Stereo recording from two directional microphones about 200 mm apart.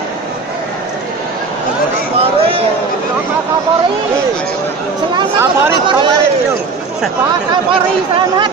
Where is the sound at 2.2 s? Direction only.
30° right (ahead or behind).